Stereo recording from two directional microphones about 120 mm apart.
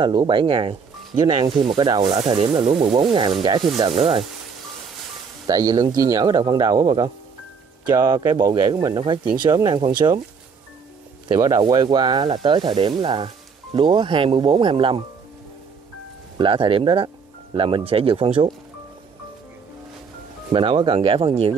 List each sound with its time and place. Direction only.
0.0 s speech: 45° right (ahead or behind)
1.2 s speech: 35° right (ahead or behind)
2.5 s sizzle: 60° right (ahead or behind)
3.0 s speech: 45° right (ahead or behind)
3.8 s sizzle: 55° right (ahead or behind)
5.5 s speech: 30° right (ahead or behind)
11.3 s speech: 25° right (ahead or behind)
11.6 s speech: 35° right (ahead or behind)
16.3 s speech: 45° right (ahead or behind)
20.5 s speech: 45° right (ahead or behind)